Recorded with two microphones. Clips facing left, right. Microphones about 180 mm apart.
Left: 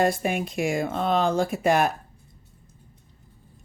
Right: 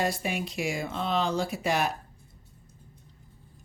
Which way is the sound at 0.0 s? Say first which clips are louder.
Left 6 dB; 50° left (ahead or behind).